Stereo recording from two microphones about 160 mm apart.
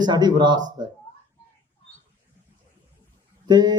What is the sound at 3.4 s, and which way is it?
Speech, 25° right (ahead or behind).